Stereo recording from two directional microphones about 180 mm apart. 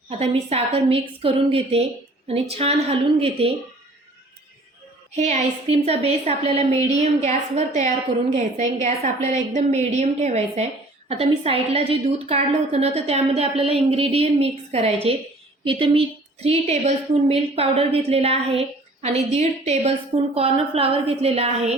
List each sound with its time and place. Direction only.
0.2 s a woman's voice: 35° right (ahead or behind)
5.1 s a woman's voice: 40° right (ahead or behind)